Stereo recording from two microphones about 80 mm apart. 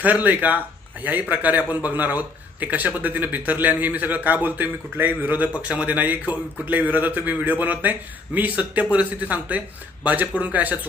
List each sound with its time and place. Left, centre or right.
0.0 s speech: right